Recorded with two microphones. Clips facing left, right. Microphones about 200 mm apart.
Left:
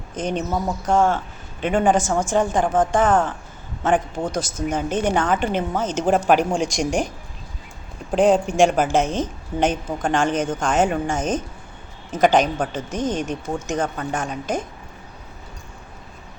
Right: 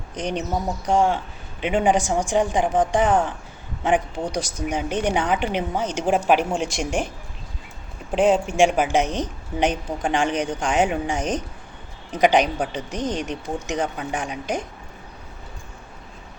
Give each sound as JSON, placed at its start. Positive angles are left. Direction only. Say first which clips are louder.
{"t": 0.1, "sound": "a woman's voice", "louder": "left 2 dB", "side_deg": -15}
{"t": 6.7, "sound": "speech", "louder": "left 3 dB", "side_deg": 40}
{"t": 8.5, "sound": "a woman's voice", "louder": "left 1 dB", "side_deg": -10}